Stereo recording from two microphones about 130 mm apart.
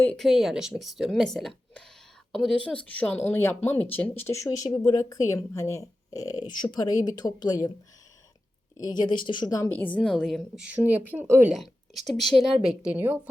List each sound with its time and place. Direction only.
0.2 s a woman's voice: centre (ahead or behind); by 7.7 s 30° left (ahead or behind)
8.8 s a woman's voice: 35° left (ahead or behind)
9.7 s a woman's voice: 10° left (ahead or behind); by 11.5 s 15° right (ahead or behind)
11.5 s a woman's voice: centre (ahead or behind)
12.6 s a woman's voice: 10° right (ahead or behind)